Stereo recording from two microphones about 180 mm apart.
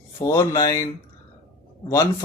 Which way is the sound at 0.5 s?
20° left (ahead or behind).